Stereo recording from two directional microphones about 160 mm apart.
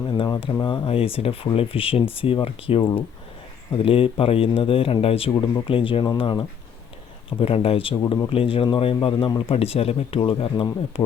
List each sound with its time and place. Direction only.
0.1 s speech: 30° left (ahead or behind)